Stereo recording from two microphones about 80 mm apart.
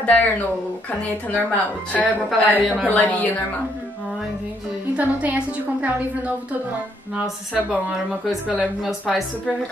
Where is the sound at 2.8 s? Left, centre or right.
Centre.